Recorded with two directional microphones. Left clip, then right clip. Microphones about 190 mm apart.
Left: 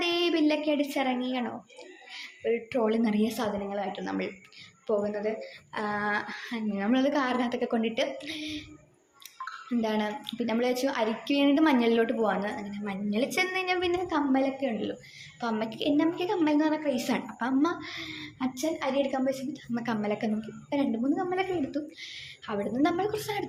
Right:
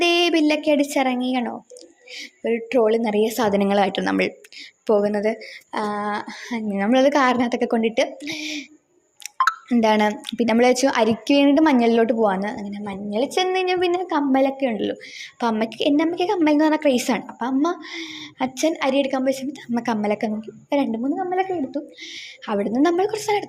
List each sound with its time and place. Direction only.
0.0 s speech: 45° right (ahead or behind)
3.7 s speech: 55° right (ahead or behind); by 20.7 s 30° right (ahead or behind)
20.7 s speech: 40° right (ahead or behind)
21.0 s a woman's voice: 25° right (ahead or behind)